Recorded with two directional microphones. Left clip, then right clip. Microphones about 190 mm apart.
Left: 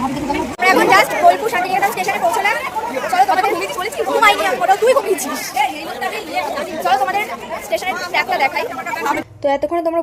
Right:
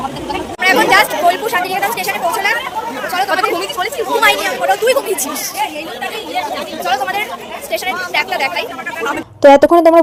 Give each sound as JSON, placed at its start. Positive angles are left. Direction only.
{"t": 0.6, "sound": "speech", "side_deg": 10}
{"t": 6.8, "sound": "speech", "side_deg": 15}
{"t": 9.4, "sound": "speech", "side_deg": -40}